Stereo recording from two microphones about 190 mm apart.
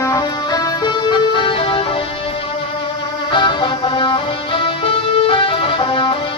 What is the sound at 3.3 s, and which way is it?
Music, 25° left (ahead or behind).